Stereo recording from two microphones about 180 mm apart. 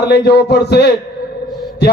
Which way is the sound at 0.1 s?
65° left (ahead or behind).